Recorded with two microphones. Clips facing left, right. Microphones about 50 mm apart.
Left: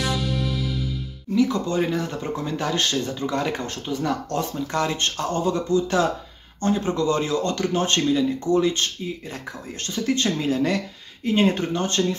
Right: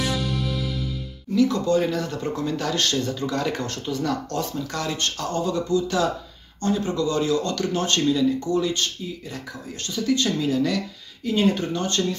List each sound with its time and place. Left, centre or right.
0.0 s music: centre
1.3 s a man's voice: centre